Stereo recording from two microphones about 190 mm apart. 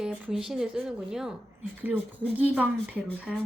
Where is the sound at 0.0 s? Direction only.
5° right (ahead or behind).